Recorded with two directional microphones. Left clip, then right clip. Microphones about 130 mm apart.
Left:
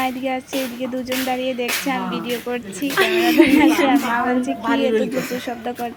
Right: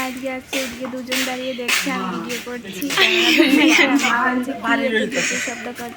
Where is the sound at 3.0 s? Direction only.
90° left.